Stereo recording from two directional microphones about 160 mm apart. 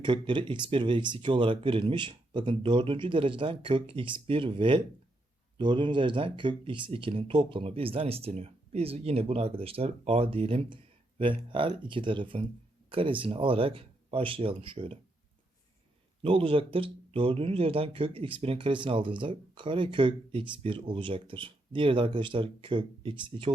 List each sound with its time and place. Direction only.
0.0 s speech: 30° right (ahead or behind)
16.2 s speech: 35° right (ahead or behind)